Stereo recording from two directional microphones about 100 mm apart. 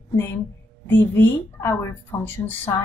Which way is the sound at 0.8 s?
20° left (ahead or behind).